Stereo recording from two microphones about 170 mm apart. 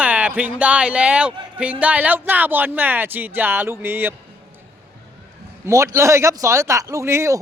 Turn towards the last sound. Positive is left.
turn(degrees=-15)  # may be behind; listen again after turning